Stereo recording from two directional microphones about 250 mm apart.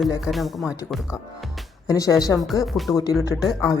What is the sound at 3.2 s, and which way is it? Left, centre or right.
Speech, centre.